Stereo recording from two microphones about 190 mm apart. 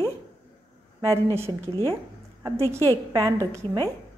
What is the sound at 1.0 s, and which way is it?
Speech, 15° right (ahead or behind).